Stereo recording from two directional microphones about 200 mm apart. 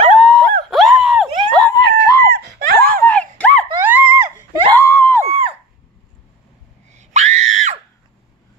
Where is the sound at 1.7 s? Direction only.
15° left (ahead or behind).